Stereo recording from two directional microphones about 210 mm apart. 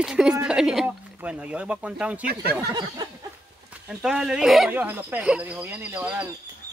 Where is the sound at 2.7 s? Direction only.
20° right (ahead or behind).